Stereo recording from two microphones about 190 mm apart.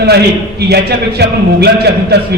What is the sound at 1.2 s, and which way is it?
A man's voice, 60° right (ahead or behind).